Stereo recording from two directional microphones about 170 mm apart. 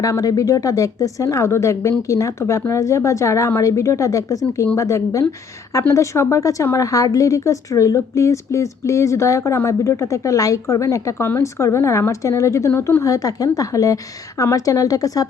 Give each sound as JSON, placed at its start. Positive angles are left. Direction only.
{"t": 0.0, "sound": "a woman's voice", "side_deg": 20}